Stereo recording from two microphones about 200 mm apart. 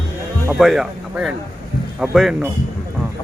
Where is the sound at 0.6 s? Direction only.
Centre (ahead or behind).